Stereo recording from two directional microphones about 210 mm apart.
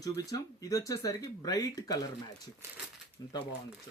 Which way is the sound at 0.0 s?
15° left (ahead or behind).